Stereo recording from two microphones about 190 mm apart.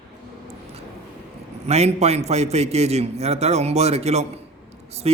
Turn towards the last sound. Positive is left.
turn(degrees=-35)  # may be behind; listen again after turning